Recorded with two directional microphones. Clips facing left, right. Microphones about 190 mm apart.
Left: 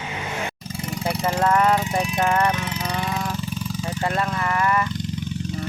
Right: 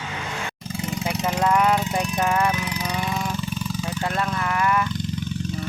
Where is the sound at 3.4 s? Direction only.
35° left (ahead or behind).